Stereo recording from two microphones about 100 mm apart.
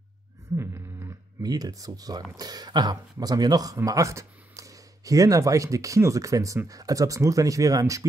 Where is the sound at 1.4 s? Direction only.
40° right (ahead or behind).